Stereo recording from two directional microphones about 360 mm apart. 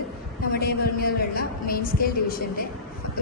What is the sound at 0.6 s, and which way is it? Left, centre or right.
A woman's voice, left.